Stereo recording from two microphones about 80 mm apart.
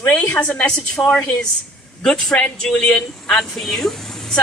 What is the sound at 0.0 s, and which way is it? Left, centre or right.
Speech, left.